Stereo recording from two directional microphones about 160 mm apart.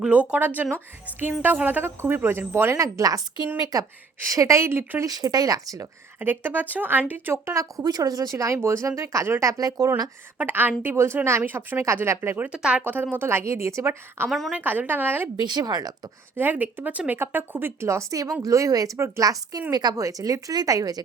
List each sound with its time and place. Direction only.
0.0 s a woman's voice: 5° right (ahead or behind); by 9.9 s 20° right (ahead or behind)
10.3 s a woman's voice: 10° right (ahead or behind)
14.3 s a woman's voice: centre (ahead or behind)
14.6 s a woman's voice: 10° right (ahead or behind)
15.4 s speech: 25° right (ahead or behind)
16.3 s a woman's voice: 10° right (ahead or behind)